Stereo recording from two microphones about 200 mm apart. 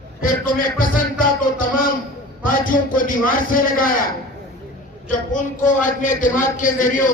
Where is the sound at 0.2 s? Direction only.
40° left (ahead or behind).